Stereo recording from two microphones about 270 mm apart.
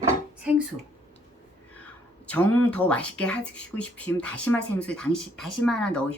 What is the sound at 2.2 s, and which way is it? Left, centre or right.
Speech, centre.